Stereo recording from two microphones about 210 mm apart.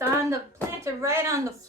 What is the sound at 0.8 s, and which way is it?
Speech, 15° right (ahead or behind).